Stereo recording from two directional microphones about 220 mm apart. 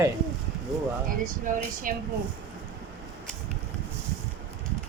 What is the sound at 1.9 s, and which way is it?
Speech, 40° right (ahead or behind).